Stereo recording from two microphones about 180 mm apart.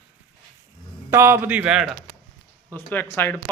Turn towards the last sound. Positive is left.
turn(degrees=10)  # may be behind; listen again after turning